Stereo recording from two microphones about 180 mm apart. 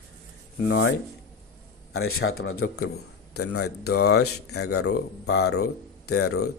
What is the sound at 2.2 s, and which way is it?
A man's voice, 75° left (ahead or behind).